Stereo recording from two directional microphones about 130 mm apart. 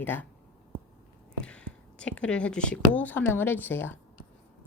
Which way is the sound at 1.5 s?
10° left (ahead or behind).